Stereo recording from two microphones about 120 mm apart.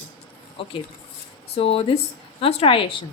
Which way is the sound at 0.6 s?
50° left (ahead or behind).